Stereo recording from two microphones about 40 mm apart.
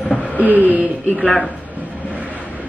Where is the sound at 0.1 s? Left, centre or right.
Left.